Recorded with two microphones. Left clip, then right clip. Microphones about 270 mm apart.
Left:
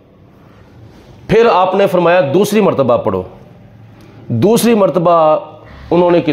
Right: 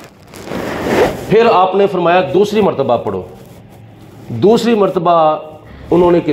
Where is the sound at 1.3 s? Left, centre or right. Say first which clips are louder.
Left 1 dB; left.